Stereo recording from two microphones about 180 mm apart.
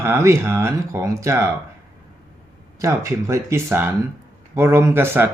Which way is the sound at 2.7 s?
15° right (ahead or behind).